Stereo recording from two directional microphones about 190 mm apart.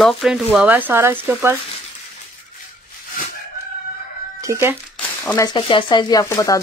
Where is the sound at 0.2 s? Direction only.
5° right (ahead or behind).